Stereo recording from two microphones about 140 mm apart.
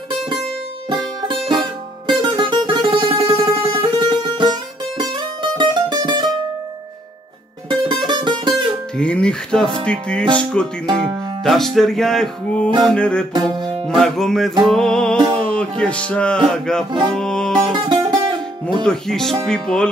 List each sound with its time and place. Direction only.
0.8 s music: 35° right (ahead or behind)
7.9 s music: 35° right (ahead or behind)
8.9 s music: 5° left (ahead or behind)
10.9 s music: 35° right (ahead or behind)
11.4 s music: centre (ahead or behind)
13.3 s music: 35° right (ahead or behind)
13.8 s music: centre (ahead or behind)
17.7 s music: 35° right (ahead or behind)
18.9 s music: 5° left (ahead or behind)